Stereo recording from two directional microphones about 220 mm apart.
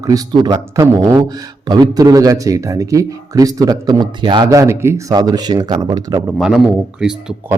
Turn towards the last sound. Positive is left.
turn(degrees=-5)  # may be behind; listen again after turning